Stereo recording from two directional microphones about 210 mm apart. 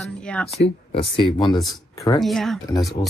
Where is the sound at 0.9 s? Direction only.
25° left (ahead or behind).